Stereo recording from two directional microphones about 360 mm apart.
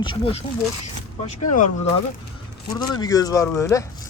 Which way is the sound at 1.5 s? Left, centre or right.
Left.